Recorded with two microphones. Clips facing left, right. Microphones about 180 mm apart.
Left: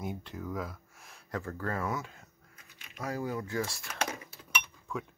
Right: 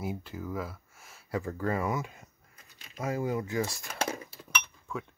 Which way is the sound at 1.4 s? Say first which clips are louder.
Right 4 dB; 15° right (ahead or behind).